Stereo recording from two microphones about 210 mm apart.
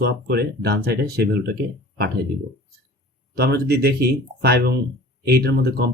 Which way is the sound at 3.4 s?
50° right (ahead or behind).